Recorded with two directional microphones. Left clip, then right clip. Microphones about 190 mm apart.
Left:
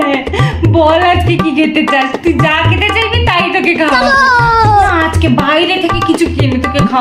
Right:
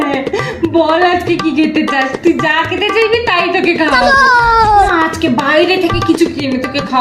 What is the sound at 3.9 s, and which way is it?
A child's voice, centre (ahead or behind).